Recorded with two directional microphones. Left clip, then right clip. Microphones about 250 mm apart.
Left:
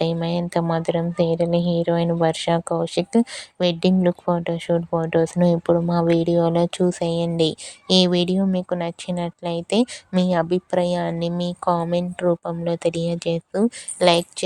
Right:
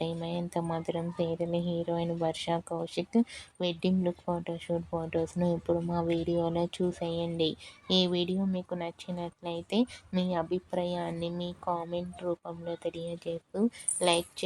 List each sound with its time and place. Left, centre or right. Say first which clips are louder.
0.0 s speech: left 11 dB; left